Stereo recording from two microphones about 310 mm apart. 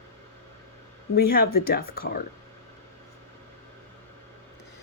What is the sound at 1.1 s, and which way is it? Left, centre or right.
Speech, left.